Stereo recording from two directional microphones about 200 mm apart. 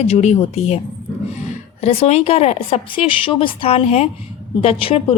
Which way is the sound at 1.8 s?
30° left (ahead or behind).